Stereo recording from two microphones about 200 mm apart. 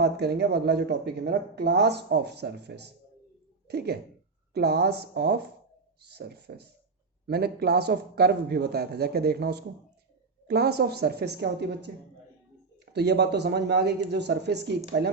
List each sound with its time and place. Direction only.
0.0 s speech: 55° right (ahead or behind)